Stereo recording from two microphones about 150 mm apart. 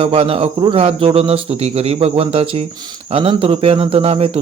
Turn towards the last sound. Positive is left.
turn(degrees=-40)  # may be behind; listen again after turning